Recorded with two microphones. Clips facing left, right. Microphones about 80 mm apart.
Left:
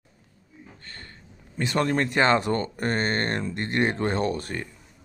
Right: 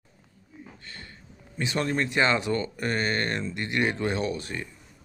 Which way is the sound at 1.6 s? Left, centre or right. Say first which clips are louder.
Left 3 dB; left.